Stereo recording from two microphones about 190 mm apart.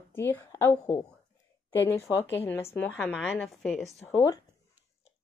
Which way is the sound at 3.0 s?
5° right (ahead or behind).